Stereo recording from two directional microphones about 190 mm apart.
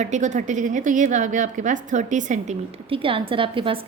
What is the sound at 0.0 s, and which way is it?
A woman's voice, 40° right (ahead or behind).